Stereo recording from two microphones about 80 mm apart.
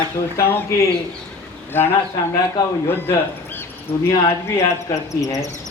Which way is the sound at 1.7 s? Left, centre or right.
Left.